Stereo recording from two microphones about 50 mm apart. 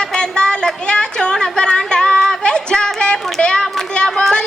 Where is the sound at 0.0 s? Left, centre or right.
Centre.